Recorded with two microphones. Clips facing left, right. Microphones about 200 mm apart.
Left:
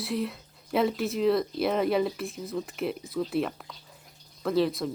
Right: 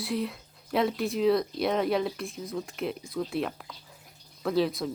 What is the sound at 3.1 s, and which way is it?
Speech, centre (ahead or behind).